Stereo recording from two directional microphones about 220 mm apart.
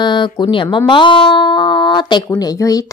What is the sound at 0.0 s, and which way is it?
Speech, 20° left (ahead or behind).